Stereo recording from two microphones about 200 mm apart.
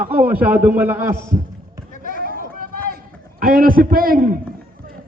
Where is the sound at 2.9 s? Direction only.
45° right (ahead or behind).